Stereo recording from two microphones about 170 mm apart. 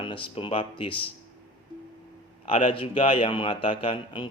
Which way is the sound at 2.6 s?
30° left (ahead or behind).